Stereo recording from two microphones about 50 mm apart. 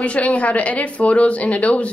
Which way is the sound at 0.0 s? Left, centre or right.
Left.